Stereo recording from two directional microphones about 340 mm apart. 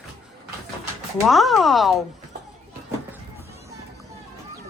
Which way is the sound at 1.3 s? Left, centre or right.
Centre.